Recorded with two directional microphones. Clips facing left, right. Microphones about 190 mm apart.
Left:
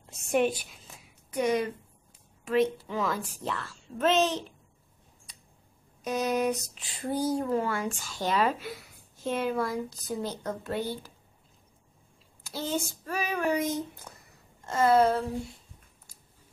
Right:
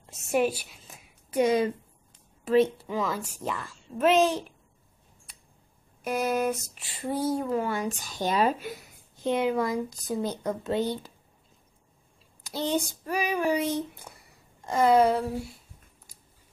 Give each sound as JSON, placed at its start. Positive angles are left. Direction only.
{"t": 0.1, "sound": "a woman's voice", "side_deg": -5}
{"t": 1.3, "sound": "a woman's voice", "side_deg": -25}
{"t": 2.9, "sound": "speech", "side_deg": -10}
{"t": 6.0, "sound": "speech", "side_deg": -10}
{"t": 7.6, "sound": "speech", "side_deg": -15}
{"t": 12.4, "sound": "speech", "side_deg": -15}
{"t": 14.1, "sound": "a sound", "side_deg": -10}
{"t": 14.7, "sound": "speech", "side_deg": -15}
{"t": 16.1, "sound": "biting", "side_deg": -15}